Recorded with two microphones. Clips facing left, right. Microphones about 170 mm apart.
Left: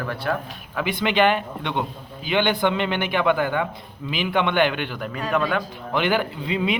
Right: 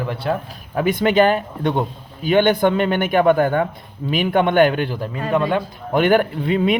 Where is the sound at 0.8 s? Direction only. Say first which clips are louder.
Right 5 dB; 45° right (ahead or behind); by 5.6 s 25° right (ahead or behind).